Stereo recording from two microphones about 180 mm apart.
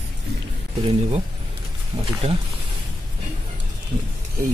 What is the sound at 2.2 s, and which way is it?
Speech, 40° right (ahead or behind).